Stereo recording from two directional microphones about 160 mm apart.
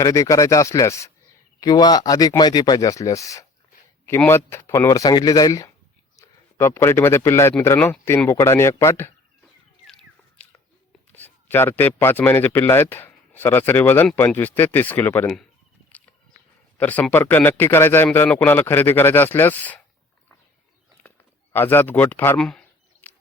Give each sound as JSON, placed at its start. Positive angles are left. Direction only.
{"t": 0.0, "sound": "speech", "side_deg": 20}
{"t": 9.8, "sound": "a sound", "side_deg": 5}
{"t": 11.8, "sound": "speech", "side_deg": 10}
{"t": 16.7, "sound": "speech", "side_deg": 10}
{"t": 21.5, "sound": "speech", "side_deg": 15}
{"t": 22.4, "sound": "a sound", "side_deg": 5}